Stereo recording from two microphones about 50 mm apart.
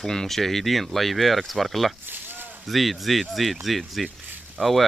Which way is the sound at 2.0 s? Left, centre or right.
Right.